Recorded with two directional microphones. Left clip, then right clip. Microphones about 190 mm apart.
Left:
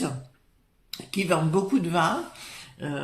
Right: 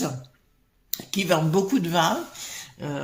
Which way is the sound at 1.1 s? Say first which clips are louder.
Right 2 dB; 35° right (ahead or behind).